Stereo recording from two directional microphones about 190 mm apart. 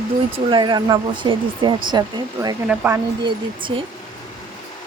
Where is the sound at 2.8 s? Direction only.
5° right (ahead or behind).